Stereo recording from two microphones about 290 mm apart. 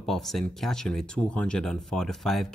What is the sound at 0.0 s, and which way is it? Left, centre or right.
Speech, centre.